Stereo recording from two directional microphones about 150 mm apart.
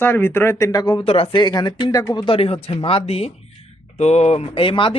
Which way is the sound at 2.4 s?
40° left (ahead or behind).